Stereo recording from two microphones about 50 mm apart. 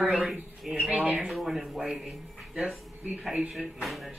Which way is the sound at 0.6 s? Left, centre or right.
Centre.